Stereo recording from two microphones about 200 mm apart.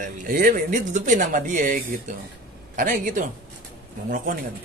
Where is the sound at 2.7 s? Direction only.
45° right (ahead or behind).